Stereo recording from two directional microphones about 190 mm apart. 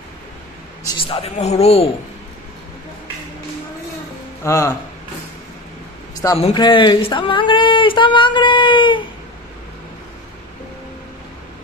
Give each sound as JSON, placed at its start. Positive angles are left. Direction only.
{"t": 0.8, "sound": "speech", "side_deg": 25}
{"t": 4.4, "sound": "speech", "side_deg": 15}
{"t": 6.5, "sound": "speech", "side_deg": 25}